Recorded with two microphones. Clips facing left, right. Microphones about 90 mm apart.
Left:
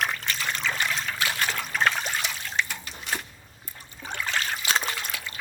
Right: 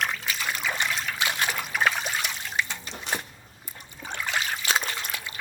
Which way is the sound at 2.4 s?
20° right (ahead or behind).